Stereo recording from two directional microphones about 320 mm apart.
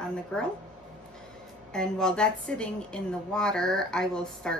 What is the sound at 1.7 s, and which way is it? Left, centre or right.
A woman's voice, centre.